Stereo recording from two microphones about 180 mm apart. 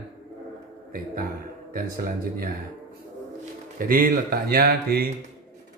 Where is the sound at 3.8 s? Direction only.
50° right (ahead or behind).